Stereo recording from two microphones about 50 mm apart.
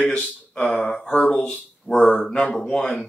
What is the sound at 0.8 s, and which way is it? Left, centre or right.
Speech, centre.